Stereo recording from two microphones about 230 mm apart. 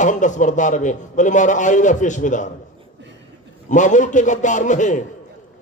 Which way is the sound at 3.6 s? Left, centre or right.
Left.